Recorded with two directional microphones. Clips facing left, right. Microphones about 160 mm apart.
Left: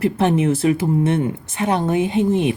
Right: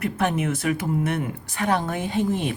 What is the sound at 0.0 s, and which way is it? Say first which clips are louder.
Speech: left 7 dB; 30° left (ahead or behind).